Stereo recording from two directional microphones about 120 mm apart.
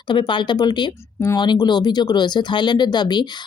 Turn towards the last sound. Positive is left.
turn(degrees=35)  # may be behind; listen again after turning